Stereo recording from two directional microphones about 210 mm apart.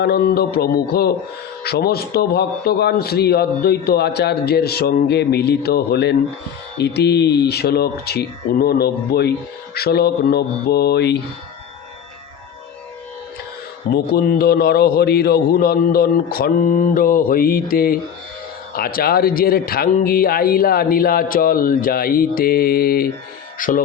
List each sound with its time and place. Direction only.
0.0 s speech: 50° left (ahead or behind)
13.9 s speech: 45° left (ahead or behind)